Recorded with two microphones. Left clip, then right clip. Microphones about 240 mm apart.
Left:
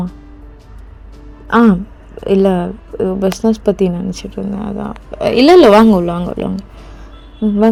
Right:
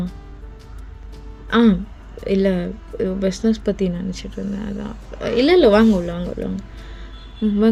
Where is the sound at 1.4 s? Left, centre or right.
Centre.